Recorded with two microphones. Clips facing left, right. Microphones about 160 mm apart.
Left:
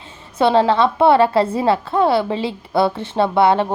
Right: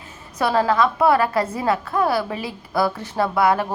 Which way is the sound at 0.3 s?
25° left (ahead or behind).